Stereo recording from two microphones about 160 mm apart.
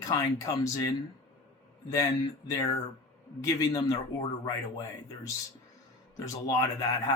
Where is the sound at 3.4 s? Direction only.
25° left (ahead or behind).